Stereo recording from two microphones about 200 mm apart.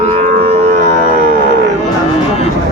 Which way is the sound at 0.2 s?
30° right (ahead or behind).